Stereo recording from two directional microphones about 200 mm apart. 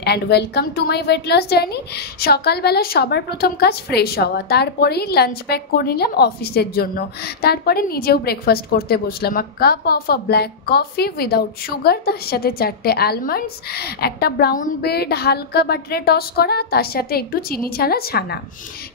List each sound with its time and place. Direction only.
0.0 s a woman's voice: 55° left (ahead or behind)